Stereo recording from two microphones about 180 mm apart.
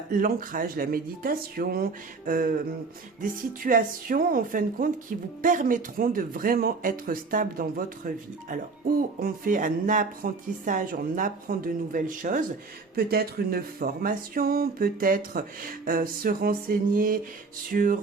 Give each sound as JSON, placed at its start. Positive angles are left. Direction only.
{"t": 0.1, "sound": "speech", "side_deg": -50}
{"t": 13.0, "sound": "speech", "side_deg": -60}